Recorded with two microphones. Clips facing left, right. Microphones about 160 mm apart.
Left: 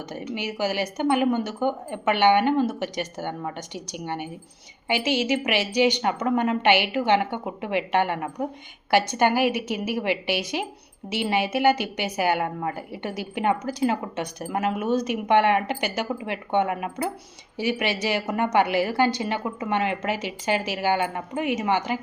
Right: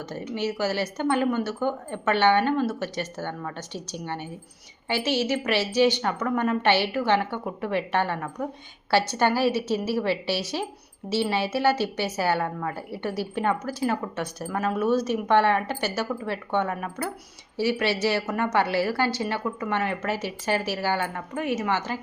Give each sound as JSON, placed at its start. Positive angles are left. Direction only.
{"t": 0.1, "sound": "a woman's voice", "side_deg": 15}